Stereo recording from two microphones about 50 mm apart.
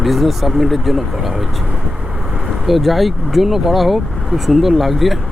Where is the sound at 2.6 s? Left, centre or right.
Centre.